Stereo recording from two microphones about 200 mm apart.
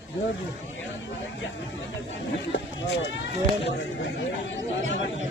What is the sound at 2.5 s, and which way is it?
Speech, 65° left (ahead or behind).